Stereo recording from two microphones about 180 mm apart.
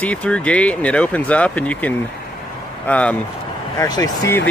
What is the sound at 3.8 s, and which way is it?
Speech, 20° left (ahead or behind).